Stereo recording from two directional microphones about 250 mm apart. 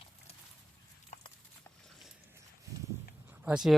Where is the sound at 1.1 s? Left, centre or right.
Left.